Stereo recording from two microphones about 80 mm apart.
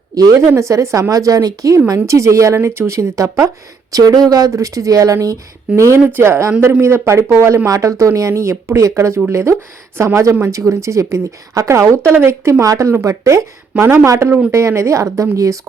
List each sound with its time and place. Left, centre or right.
0.4 s speech: right
12.1 s speech: right